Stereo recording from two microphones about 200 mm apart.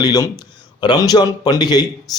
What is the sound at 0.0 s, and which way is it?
A man's voice, 20° left (ahead or behind).